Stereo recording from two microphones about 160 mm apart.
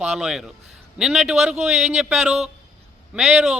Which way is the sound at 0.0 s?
5° right (ahead or behind).